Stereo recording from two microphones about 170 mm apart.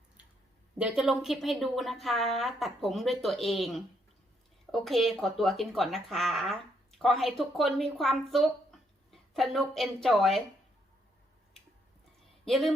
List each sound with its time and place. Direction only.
0.8 s speech: 5° right (ahead or behind)
12.5 s speech: centre (ahead or behind)